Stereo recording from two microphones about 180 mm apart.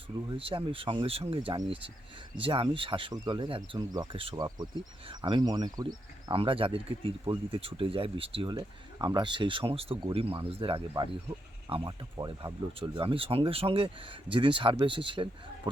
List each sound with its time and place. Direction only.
0.3 s speech: 30° right (ahead or behind)
12.1 s speech: 20° right (ahead or behind)